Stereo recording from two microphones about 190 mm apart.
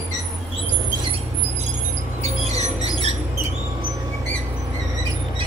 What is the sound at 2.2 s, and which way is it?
Music, 35° right (ahead or behind).